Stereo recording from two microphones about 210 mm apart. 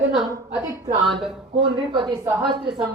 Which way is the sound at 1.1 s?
Centre (ahead or behind).